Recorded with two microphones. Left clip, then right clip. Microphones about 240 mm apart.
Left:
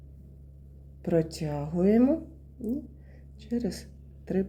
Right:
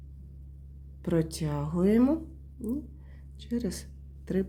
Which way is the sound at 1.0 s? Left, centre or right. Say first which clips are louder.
Left 3 dB; right.